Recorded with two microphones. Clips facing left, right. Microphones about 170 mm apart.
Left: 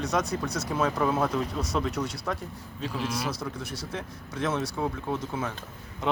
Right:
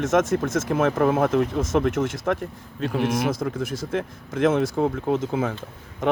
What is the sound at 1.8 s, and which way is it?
Speech, 90° right.